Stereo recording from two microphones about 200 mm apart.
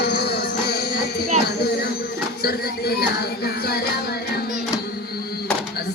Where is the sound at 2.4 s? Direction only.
50° left (ahead or behind).